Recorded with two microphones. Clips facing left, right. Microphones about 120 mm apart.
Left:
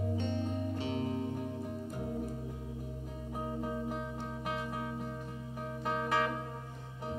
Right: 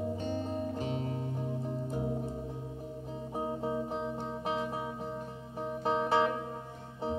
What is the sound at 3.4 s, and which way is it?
Music, 20° right (ahead or behind).